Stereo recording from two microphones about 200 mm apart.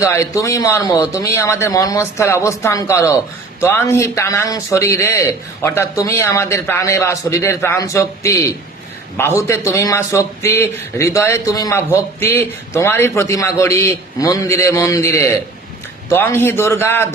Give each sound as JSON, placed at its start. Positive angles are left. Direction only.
{"t": 0.0, "sound": "a man's voice", "side_deg": 15}